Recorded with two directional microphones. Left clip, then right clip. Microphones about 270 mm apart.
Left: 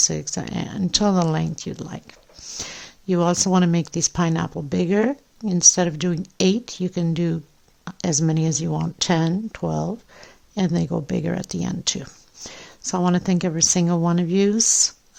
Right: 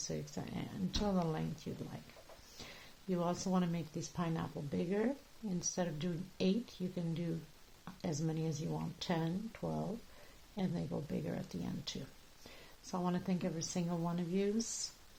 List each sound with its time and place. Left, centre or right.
0.1 s speech: left